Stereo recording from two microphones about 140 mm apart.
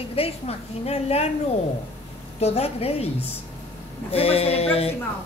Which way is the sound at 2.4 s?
45° left (ahead or behind).